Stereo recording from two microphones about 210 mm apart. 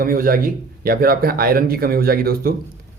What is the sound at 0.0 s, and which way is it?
A man's voice, 45° right (ahead or behind).